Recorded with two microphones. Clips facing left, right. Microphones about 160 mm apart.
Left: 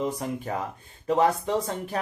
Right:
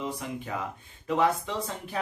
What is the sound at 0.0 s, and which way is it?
Speech, 40° left (ahead or behind).